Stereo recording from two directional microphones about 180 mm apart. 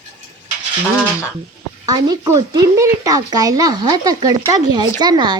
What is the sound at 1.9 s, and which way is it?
A child's voice, 20° right (ahead or behind).